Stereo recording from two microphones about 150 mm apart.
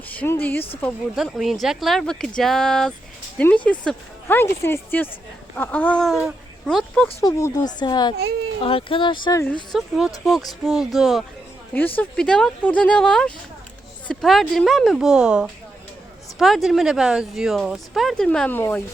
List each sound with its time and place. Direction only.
0.2 s speech: 10° left (ahead or behind)
1.1 s speech: centre (ahead or behind)
7.2 s speech: 20° left (ahead or behind)
9.7 s speech: centre (ahead or behind)